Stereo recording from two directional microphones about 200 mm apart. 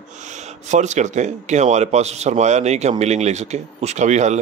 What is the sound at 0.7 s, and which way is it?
Speech, 35° right (ahead or behind).